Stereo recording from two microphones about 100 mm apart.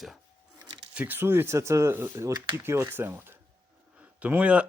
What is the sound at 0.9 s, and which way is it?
Speech, 20° right (ahead or behind).